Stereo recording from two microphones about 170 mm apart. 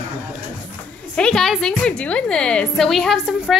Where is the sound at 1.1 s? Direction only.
5° left (ahead or behind).